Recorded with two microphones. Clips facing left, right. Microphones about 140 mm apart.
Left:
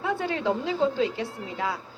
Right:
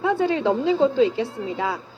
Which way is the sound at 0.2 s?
25° right (ahead or behind).